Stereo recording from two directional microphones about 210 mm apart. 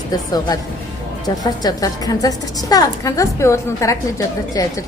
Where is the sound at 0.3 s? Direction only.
20° left (ahead or behind).